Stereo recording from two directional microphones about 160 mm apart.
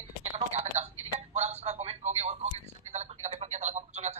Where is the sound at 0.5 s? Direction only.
45° right (ahead or behind).